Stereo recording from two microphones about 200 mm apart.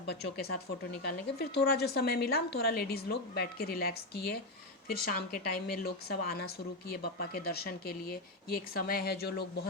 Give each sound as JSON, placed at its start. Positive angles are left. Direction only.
{"t": 0.0, "sound": "a woman's voice", "side_deg": 55}